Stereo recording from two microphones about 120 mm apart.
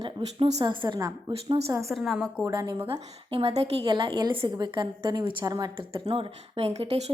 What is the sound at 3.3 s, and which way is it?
A woman's voice, 50° right (ahead or behind).